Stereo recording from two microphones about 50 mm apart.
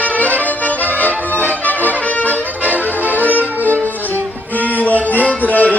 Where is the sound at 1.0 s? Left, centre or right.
Left.